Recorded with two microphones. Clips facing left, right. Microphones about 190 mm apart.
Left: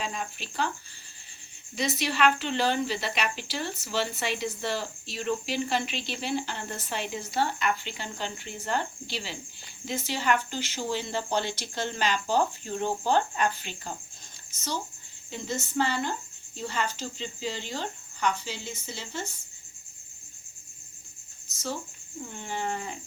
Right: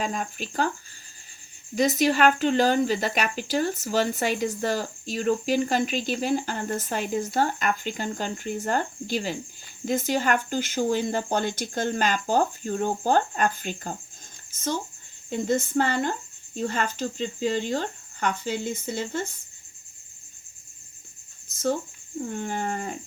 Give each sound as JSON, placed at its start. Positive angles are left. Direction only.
{"t": 0.0, "sound": "speech", "side_deg": -45}
{"t": 1.7, "sound": "speech", "side_deg": -45}
{"t": 22.4, "sound": "speech", "side_deg": -50}